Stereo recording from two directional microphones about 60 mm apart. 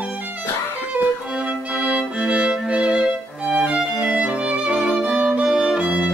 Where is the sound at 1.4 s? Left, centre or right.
Centre.